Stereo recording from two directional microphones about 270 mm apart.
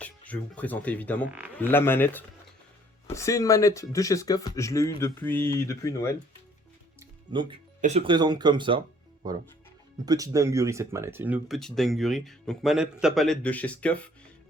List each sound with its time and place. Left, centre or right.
0.0 s speech: centre
7.3 s speech: centre